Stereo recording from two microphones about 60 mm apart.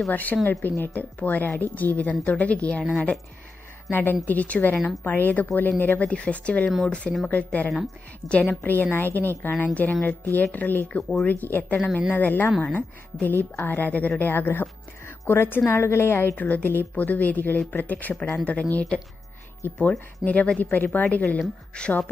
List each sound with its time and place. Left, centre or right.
0.1 s a woman's voice: left
3.9 s a woman's voice: left
6.0 s speech: centre
7.2 s a woman's voice: left
16.3 s speech: left
19.6 s a woman's voice: left
20.2 s a woman's voice: left
21.4 s speech: centre